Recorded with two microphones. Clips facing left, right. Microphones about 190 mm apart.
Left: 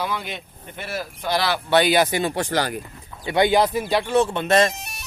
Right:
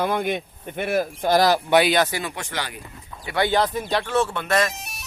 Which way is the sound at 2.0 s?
20° left (ahead or behind).